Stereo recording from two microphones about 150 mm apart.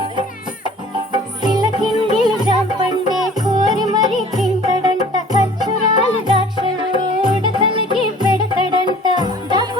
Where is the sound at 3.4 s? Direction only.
30° right (ahead or behind).